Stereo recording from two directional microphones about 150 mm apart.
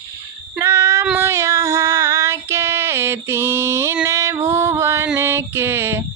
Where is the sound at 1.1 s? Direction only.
20° right (ahead or behind).